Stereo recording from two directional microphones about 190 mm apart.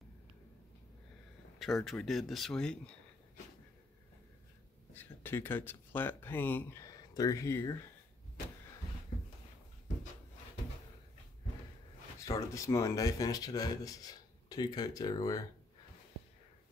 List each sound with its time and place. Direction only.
1.6 s speech: centre (ahead or behind)
4.9 s speech: 10° left (ahead or behind)
12.2 s speech: 15° left (ahead or behind)